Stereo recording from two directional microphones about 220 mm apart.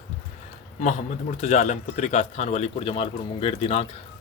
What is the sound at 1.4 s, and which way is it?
Speech, 30° left (ahead or behind).